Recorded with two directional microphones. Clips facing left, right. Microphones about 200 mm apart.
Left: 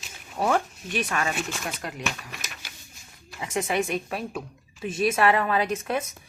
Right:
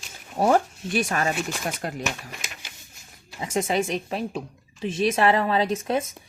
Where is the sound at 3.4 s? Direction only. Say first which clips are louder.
Right 2 dB; 25° right (ahead or behind).